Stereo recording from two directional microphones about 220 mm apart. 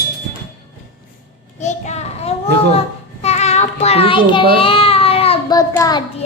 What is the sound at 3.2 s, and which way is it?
Child singing, 30° left (ahead or behind).